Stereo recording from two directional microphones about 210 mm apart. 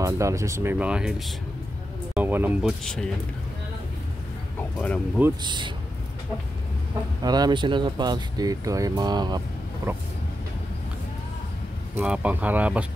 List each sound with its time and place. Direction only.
0.0 s speech: 15° right (ahead or behind)
2.8 s speech: 5° left (ahead or behind)
4.6 s speech: 5° left (ahead or behind)
5.4 s speech: 20° right (ahead or behind)
7.2 s speech: 20° right (ahead or behind)
12.0 s speech: 5° right (ahead or behind)